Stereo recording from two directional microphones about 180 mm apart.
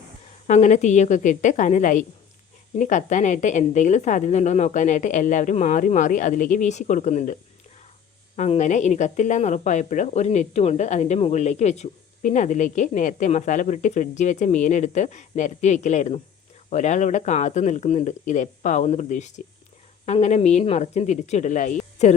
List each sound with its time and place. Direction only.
0.4 s a woman's voice: 40° left (ahead or behind)
8.4 s a woman's voice: 40° left (ahead or behind)